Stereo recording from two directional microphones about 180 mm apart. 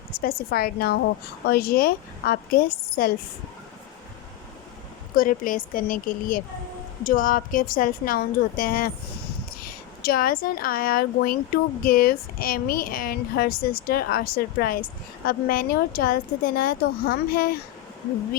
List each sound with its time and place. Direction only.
0.2 s a woman's voice: 55° left (ahead or behind)
5.1 s a woman's voice: 50° left (ahead or behind)